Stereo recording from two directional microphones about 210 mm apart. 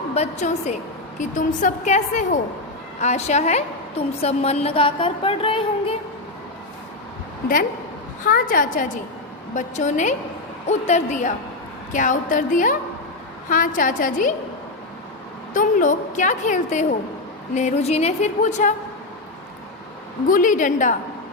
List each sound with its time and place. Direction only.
0.1 s a woman's voice: 30° left (ahead or behind)
8.2 s a woman's voice: 40° left (ahead or behind)
15.5 s a woman's voice: 40° left (ahead or behind)
20.2 s a woman's voice: 40° left (ahead or behind)